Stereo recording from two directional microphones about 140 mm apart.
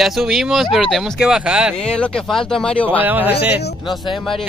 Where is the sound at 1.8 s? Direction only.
5° left (ahead or behind).